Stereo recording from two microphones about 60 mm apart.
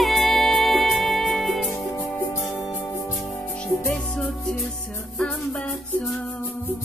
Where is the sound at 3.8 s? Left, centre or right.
Centre.